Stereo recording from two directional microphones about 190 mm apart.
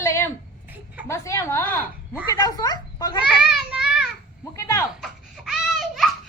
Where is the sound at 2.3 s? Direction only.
20° left (ahead or behind).